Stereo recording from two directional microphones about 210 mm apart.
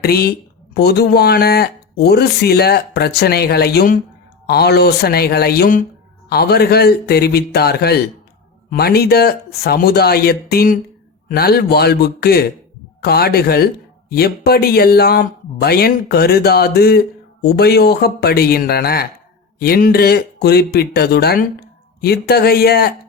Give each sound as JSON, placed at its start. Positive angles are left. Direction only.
{"t": 0.0, "sound": "speech", "side_deg": 50}